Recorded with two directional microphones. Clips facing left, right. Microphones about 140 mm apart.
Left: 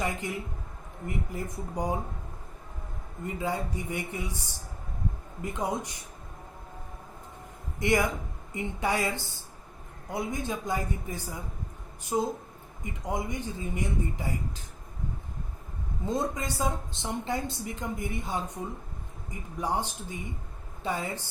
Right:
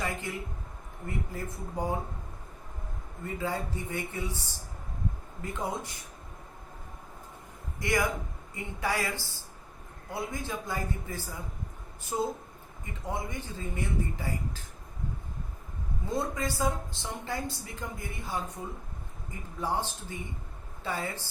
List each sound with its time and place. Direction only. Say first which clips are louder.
0.0 s speech: left 3 dB; 20° left (ahead or behind)
3.2 s speech: left 2 dB; 15° left (ahead or behind)
7.8 s a man's voice: left 3 dB; 20° left (ahead or behind)
16.0 s speech: left 2 dB; 20° left (ahead or behind)